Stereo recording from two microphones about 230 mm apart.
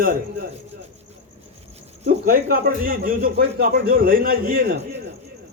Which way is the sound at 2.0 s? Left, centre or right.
Right.